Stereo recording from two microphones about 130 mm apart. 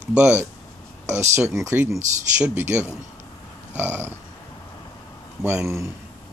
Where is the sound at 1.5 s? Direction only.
20° right (ahead or behind).